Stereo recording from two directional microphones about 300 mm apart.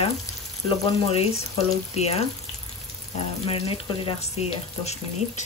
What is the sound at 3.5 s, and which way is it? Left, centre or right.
Speech, centre.